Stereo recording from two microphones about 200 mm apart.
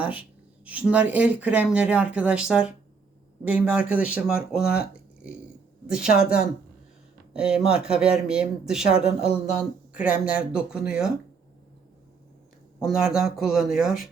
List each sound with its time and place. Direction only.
0.0 s speech: 5° right (ahead or behind)
4.6 s speech: 50° left (ahead or behind)
5.9 s speech: 5° right (ahead or behind)
7.4 s speech: 5° right (ahead or behind)
12.8 s speech: centre (ahead or behind)